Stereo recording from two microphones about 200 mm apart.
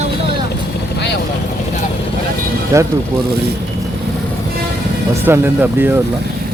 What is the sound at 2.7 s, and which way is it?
Speech, 15° right (ahead or behind).